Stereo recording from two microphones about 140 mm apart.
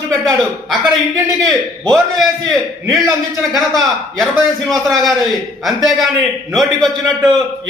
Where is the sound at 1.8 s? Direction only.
Centre (ahead or behind).